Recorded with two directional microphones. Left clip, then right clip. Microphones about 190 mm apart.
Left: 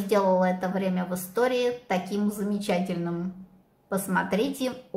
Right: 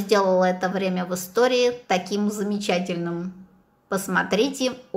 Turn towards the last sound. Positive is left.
turn(degrees=-15)  # may be behind; listen again after turning